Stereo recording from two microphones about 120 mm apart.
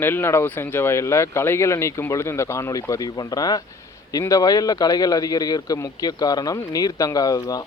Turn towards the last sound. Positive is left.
turn(degrees=30)  # may be behind; listen again after turning